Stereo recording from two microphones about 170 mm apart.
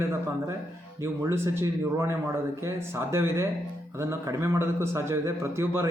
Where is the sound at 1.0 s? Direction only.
15° right (ahead or behind).